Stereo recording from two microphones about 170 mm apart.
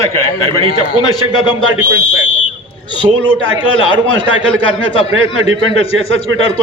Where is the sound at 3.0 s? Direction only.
15° right (ahead or behind).